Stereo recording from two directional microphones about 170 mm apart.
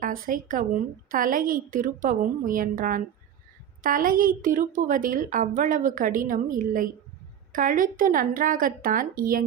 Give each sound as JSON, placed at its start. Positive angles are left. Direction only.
{"t": 0.0, "sound": "a woman's voice", "side_deg": -55}